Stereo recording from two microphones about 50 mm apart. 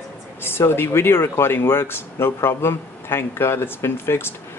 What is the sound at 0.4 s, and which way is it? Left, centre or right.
Speech, left.